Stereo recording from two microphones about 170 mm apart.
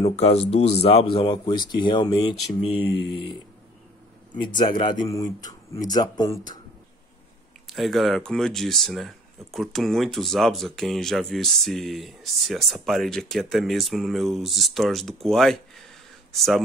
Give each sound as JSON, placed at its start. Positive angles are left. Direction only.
{"t": 0.0, "sound": "speech", "side_deg": 40}
{"t": 4.4, "sound": "speech", "side_deg": 25}
{"t": 7.6, "sound": "speech", "side_deg": 0}